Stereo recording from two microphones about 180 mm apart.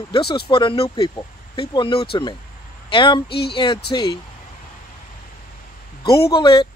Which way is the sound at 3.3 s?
65° left (ahead or behind).